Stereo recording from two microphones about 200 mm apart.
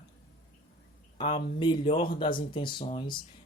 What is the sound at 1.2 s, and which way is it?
Speech, 25° left (ahead or behind).